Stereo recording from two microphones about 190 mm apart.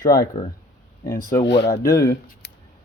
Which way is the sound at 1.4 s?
65° left (ahead or behind).